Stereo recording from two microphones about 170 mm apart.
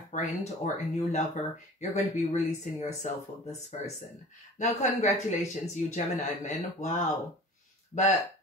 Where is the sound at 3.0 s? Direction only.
45° left (ahead or behind).